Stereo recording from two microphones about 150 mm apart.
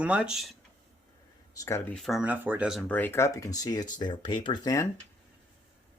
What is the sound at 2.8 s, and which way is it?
Speech, 10° left (ahead or behind).